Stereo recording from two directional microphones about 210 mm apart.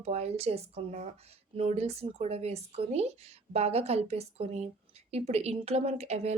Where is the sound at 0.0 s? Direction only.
30° right (ahead or behind).